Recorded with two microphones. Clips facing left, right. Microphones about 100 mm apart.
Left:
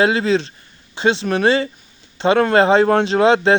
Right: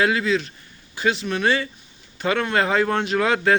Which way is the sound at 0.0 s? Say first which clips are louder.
Left 4 dB; 30° left (ahead or behind).